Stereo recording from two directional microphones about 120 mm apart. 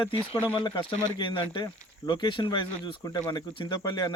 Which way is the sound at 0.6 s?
40° left (ahead or behind).